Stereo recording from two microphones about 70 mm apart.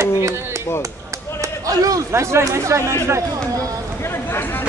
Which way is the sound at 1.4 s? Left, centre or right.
Right.